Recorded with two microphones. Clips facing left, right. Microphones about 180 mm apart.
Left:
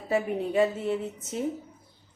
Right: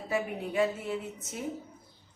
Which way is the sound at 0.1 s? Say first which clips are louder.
Left 6 dB; 30° left (ahead or behind).